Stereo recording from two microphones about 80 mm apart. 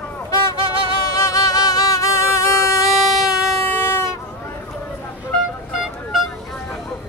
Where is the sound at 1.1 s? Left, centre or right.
Left.